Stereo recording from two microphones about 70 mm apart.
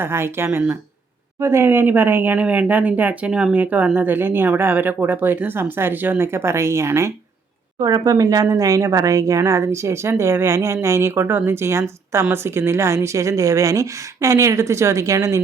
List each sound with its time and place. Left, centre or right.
0.0 s speech: right
7.8 s a woman's voice: right